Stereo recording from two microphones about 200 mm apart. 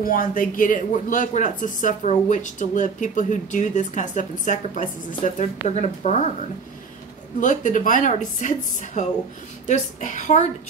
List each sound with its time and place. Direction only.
0.0 s speech: 45° left (ahead or behind)
7.3 s speech: 40° left (ahead or behind)